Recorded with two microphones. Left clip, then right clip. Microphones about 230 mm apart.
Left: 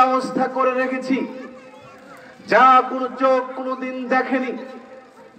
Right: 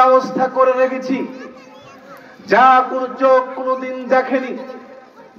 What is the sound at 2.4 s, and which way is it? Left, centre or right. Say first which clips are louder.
A man's voice: right 2 dB; left.